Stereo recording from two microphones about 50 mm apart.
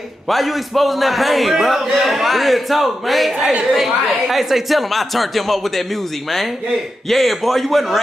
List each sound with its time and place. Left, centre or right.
0.3 s a man's voice: centre
7.1 s a man's voice: centre